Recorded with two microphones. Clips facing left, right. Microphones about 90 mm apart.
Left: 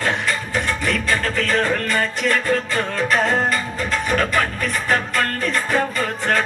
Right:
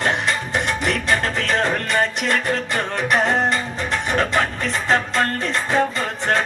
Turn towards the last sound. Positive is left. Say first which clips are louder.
# even
turn(degrees=-20)  # may be behind; listen again after turning